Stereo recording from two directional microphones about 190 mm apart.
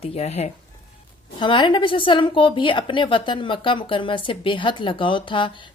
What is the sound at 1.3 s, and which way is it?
A woman's voice, 25° left (ahead or behind).